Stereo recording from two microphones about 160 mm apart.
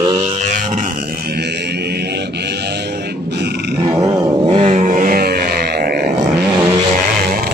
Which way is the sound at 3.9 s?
20° right (ahead or behind).